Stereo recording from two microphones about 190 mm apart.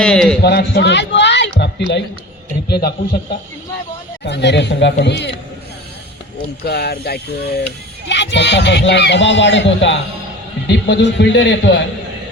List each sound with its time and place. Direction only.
0.0 s a man's voice: 5° left (ahead or behind)
0.4 s a man's voice: 60° left (ahead or behind)
6.7 s a man's voice: 55° left (ahead or behind)